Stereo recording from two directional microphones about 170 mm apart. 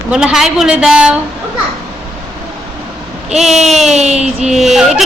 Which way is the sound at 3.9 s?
40° right (ahead or behind).